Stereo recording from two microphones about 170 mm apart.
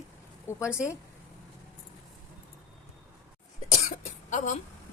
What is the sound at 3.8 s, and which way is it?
Cough, 45° left (ahead or behind).